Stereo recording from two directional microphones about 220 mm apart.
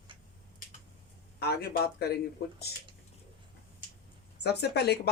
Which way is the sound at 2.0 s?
45° left (ahead or behind).